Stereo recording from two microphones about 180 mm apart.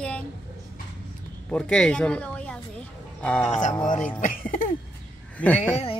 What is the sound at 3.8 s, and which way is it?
Speech, 45° left (ahead or behind).